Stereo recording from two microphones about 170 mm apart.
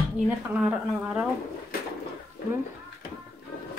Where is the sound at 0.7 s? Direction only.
5° right (ahead or behind).